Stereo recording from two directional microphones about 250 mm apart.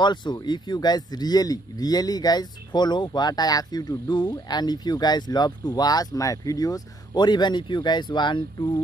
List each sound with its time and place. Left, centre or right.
0.0 s speech: centre